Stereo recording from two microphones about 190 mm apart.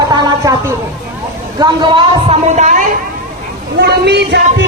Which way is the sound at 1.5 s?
25° right (ahead or behind).